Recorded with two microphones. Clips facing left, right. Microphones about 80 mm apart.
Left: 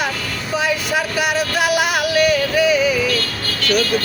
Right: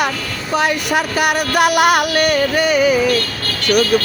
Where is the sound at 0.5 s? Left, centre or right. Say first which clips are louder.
Right 3 dB; right.